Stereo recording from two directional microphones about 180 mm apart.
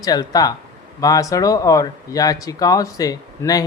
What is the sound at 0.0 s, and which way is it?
Speech, 20° left (ahead or behind).